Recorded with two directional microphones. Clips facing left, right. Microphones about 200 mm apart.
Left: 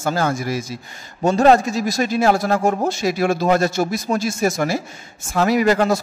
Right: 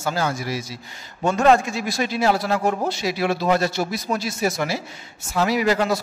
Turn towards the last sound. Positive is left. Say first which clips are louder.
# left 4 dB
turn(degrees=50)  # may be behind; listen again after turning